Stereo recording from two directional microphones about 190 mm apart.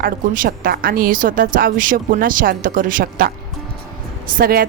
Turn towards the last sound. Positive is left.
turn(degrees=-50)  # may be behind; listen again after turning